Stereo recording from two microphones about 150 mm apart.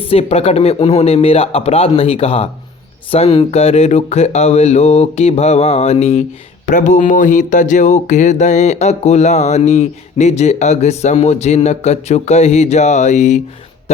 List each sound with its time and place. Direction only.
0.0 s speech: 40° left (ahead or behind)
6.7 s speech: 55° left (ahead or behind)